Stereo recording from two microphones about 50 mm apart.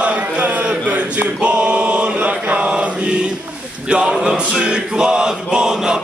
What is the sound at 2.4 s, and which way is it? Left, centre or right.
Mantra, right.